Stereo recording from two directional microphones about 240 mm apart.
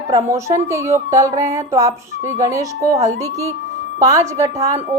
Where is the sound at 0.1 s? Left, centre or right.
Centre.